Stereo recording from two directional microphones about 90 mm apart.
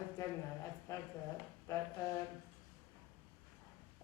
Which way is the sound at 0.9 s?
40° left (ahead or behind).